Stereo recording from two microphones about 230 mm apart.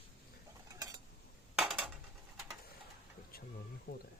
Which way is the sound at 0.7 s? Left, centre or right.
Centre.